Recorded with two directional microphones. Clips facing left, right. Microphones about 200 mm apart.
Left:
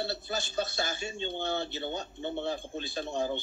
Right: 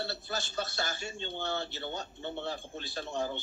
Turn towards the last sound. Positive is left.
turn(degrees=15)  # may be behind; listen again after turning